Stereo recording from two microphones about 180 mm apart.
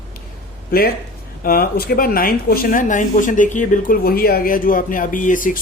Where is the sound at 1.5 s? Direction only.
55° left (ahead or behind).